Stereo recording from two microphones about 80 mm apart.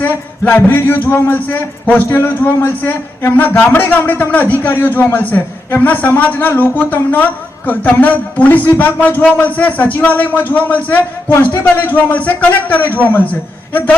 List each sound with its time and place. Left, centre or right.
0.0 s a man's voice: left